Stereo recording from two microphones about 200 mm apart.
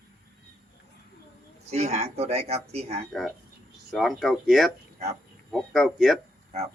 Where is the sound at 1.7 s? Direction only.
30° right (ahead or behind).